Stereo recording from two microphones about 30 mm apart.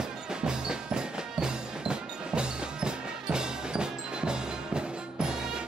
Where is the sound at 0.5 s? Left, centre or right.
Right.